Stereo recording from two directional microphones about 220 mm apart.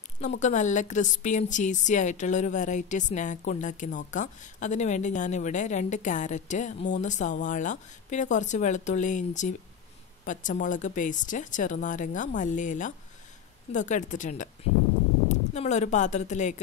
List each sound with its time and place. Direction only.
0.4 s a woman's voice: 35° left (ahead or behind)